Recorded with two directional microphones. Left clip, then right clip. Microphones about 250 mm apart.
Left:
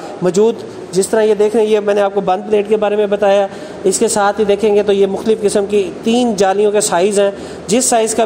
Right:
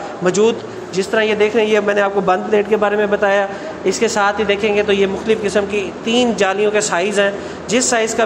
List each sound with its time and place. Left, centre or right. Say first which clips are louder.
0.2 s speech: left 2 dB; left